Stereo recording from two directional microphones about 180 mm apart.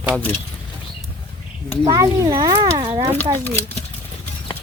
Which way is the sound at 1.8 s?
20° right (ahead or behind).